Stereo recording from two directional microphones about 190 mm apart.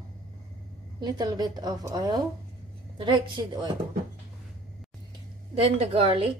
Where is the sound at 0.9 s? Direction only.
20° right (ahead or behind).